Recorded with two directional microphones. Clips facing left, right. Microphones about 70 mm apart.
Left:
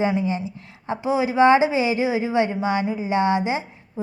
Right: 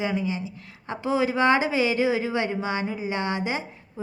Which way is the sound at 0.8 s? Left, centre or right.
Centre.